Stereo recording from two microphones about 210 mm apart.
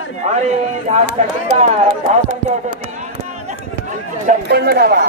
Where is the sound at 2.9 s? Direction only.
35° right (ahead or behind).